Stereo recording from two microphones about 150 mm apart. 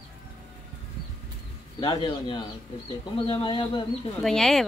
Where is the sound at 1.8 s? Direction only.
30° left (ahead or behind).